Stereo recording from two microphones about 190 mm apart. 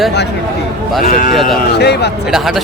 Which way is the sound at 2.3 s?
Centre (ahead or behind).